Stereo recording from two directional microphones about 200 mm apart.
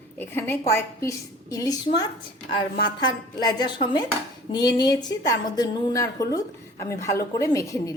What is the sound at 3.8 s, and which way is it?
A woman's voice, 25° left (ahead or behind).